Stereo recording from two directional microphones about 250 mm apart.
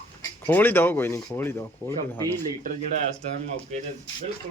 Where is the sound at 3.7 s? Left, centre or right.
Right.